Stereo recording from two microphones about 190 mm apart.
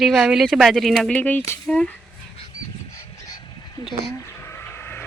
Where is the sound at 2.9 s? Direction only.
15° left (ahead or behind).